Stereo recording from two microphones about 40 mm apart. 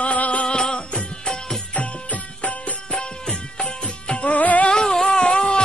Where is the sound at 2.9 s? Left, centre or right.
Centre.